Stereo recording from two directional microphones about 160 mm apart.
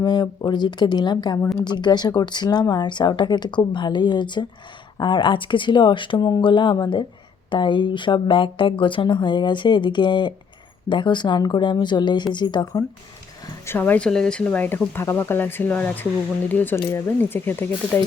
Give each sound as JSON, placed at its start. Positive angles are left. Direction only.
{"t": 0.0, "sound": "speech", "side_deg": 25}
{"t": 13.7, "sound": "speech", "side_deg": 10}